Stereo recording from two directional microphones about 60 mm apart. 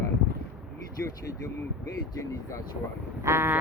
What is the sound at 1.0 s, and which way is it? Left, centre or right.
Speech, left.